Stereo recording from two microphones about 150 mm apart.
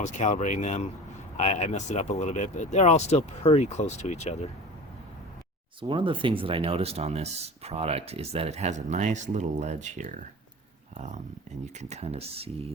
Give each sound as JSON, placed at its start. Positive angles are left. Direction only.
{"t": 0.0, "sound": "speech", "side_deg": 50}
{"t": 5.8, "sound": "speech", "side_deg": -35}